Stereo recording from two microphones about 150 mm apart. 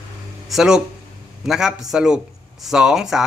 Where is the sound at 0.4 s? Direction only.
Centre (ahead or behind).